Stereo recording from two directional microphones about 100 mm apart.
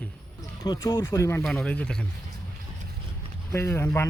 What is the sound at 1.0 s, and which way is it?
Speech, 30° left (ahead or behind).